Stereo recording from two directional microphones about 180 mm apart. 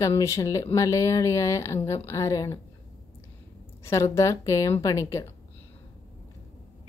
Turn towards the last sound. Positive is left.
turn(degrees=15)  # may be behind; listen again after turning